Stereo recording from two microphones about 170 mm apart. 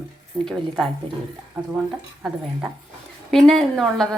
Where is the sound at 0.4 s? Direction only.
Centre (ahead or behind).